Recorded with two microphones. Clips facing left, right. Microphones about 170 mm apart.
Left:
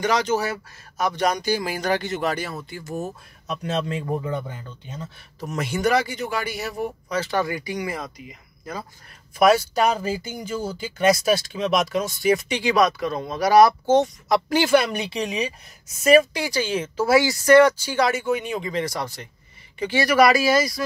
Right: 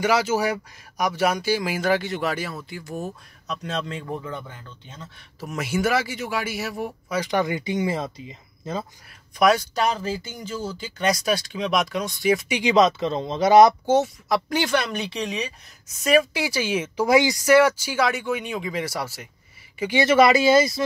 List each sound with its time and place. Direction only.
0.0 s speech: 10° right (ahead or behind)
4.0 s speech: 15° left (ahead or behind)
5.4 s speech: 5° right (ahead or behind)
7.2 s speech: 20° right (ahead or behind)
9.4 s speech: 5° left (ahead or behind)
12.5 s speech: 20° right (ahead or behind)
13.9 s speech: centre (ahead or behind); by 17.5 s 20° right (ahead or behind)
17.5 s speech: 5° right (ahead or behind)
19.8 s speech: 20° right (ahead or behind)